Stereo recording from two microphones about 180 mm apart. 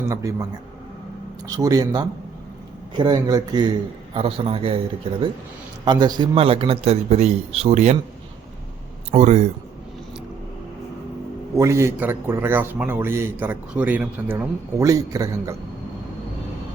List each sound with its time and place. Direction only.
0.1 s speech: 20° right (ahead or behind)
1.5 s a man's voice: 20° right (ahead or behind)
5.8 s a man's voice: 25° right (ahead or behind)
9.1 s a man's voice: 40° right (ahead or behind)
11.5 s a man's voice: 15° right (ahead or behind)